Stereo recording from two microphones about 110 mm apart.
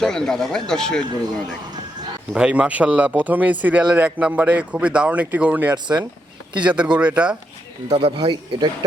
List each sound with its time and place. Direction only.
0.0 s speech: 5° left (ahead or behind)
2.3 s a man's voice: 10° right (ahead or behind)
5.7 s speech: 40° right (ahead or behind)
6.8 s a man's voice: 10° right (ahead or behind)
7.9 s speech: 65° right (ahead or behind)
8.2 s speech: 40° right (ahead or behind)